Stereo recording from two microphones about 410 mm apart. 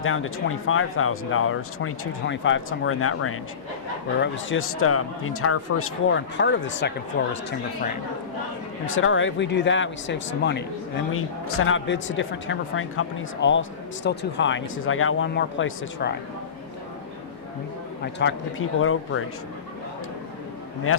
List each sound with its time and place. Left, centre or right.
0.0 s speech: left
8.9 s speech: left
18.0 s speech: left